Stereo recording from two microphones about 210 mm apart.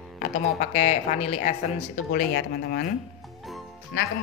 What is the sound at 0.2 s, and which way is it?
Speech, 35° left (ahead or behind).